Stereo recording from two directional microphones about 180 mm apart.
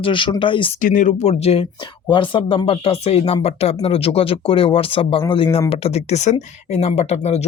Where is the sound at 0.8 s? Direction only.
45° left (ahead or behind).